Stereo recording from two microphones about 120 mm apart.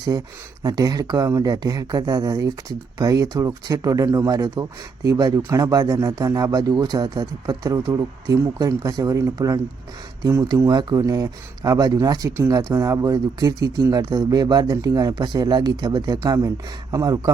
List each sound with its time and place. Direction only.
0.6 s speech: 35° right (ahead or behind)